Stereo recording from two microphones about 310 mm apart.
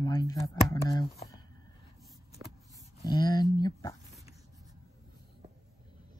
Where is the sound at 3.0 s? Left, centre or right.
Centre.